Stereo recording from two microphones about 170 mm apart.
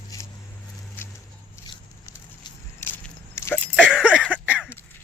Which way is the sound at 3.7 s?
5° right (ahead or behind).